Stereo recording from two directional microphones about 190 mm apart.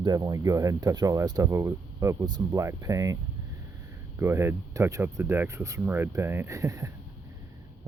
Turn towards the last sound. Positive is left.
turn(degrees=-15)  # may be behind; listen again after turning